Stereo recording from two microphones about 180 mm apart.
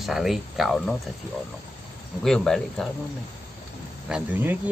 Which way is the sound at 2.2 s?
5° left (ahead or behind).